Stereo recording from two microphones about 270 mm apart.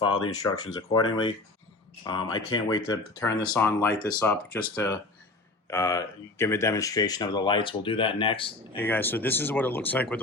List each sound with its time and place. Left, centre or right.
0.0 s speech: centre
2.0 s speech: centre
8.7 s speech: centre